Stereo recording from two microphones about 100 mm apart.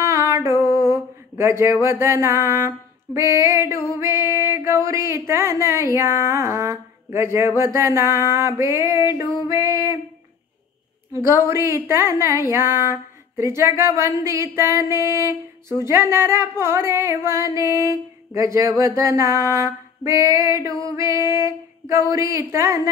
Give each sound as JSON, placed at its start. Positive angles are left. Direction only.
{"t": 0.0, "sound": "music", "side_deg": -35}
{"t": 0.8, "sound": "a sound", "side_deg": -30}
{"t": 3.9, "sound": "music", "side_deg": -25}
{"t": 11.1, "sound": "music", "side_deg": -25}
{"t": 20.8, "sound": "female singing", "side_deg": -35}
{"t": 22.1, "sound": "music", "side_deg": -30}